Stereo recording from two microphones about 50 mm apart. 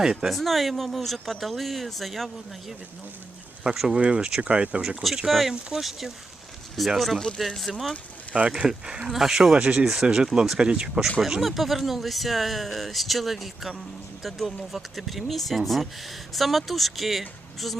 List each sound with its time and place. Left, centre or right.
0.0 s speech: centre
0.3 s speech: centre
3.8 s speech: centre
5.3 s speech: centre
8.4 s speech: right
9.6 s speech: right
9.8 s speech: centre
11.2 s speech: centre